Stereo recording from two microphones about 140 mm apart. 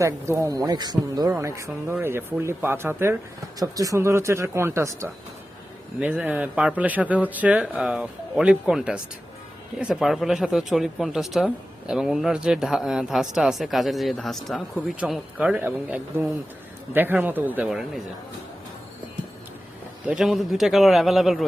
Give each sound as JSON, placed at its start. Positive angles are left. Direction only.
{"t": 0.0, "sound": "speech", "side_deg": -25}
{"t": 20.1, "sound": "speech", "side_deg": -5}